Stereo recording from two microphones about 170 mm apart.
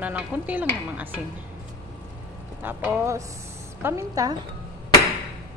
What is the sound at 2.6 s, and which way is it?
Speech, 10° right (ahead or behind).